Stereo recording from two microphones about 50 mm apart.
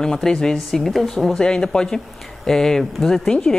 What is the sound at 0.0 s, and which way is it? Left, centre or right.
A woman's voice, centre.